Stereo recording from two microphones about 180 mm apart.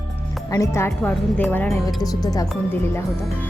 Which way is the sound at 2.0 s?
20° left (ahead or behind).